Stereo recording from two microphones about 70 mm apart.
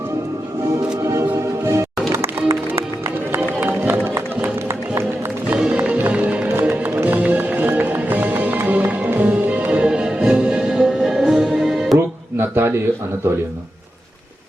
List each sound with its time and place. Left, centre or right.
1.0 s music: right
3.6 s music: right
5.5 s music: centre
11.9 s a sound: right